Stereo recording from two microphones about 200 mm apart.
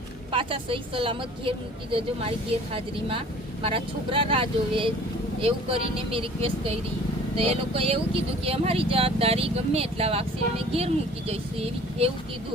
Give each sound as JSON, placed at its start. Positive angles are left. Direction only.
{"t": 0.3, "sound": "a woman's voice", "side_deg": -25}